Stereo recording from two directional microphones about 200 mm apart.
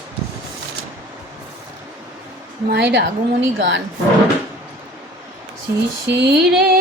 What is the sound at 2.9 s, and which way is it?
Speech, 65° right (ahead or behind).